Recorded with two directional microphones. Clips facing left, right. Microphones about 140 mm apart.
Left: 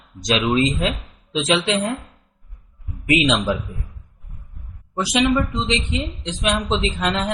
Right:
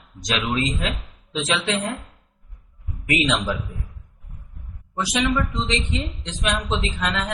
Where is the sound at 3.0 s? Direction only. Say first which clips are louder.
Left 4 dB; 15° left (ahead or behind).